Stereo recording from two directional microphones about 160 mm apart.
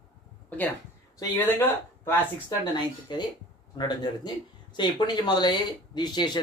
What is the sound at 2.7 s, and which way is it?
Speech, 30° left (ahead or behind).